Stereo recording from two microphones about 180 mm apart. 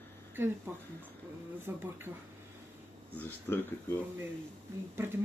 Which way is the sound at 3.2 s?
10° left (ahead or behind).